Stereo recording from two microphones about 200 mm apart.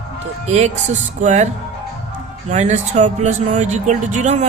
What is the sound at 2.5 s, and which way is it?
Speech, 35° right (ahead or behind).